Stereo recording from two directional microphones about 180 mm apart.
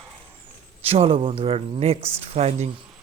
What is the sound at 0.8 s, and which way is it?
Speech, 30° right (ahead or behind).